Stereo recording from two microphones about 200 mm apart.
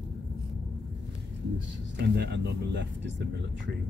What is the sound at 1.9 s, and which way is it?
Speech, 55° right (ahead or behind).